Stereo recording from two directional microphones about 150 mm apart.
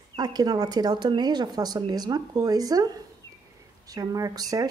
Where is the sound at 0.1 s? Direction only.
25° right (ahead or behind).